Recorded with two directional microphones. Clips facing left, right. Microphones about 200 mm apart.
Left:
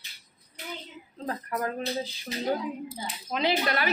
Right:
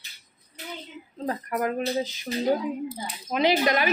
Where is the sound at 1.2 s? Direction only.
15° right (ahead or behind).